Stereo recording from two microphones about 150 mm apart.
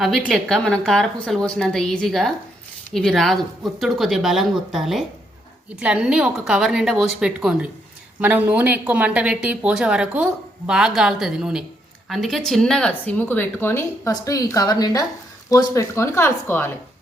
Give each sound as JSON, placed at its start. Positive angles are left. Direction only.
{"t": 0.0, "sound": "a woman's voice", "side_deg": 0}